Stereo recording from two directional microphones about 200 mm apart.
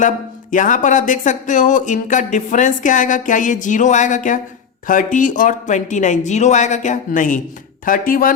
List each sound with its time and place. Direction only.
0.5 s speech: 40° left (ahead or behind)